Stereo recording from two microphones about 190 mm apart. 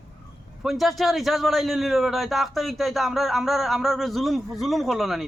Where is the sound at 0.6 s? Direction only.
Centre (ahead or behind).